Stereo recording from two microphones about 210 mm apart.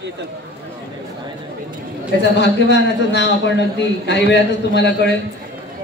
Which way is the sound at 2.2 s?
55° left (ahead or behind).